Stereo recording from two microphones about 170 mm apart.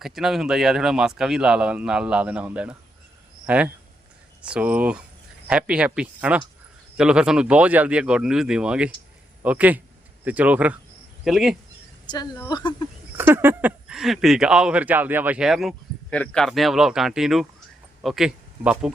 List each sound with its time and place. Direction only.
0.0 s speech: centre (ahead or behind)
12.0 s speech: 25° left (ahead or behind)
13.1 s speech: 15° right (ahead or behind)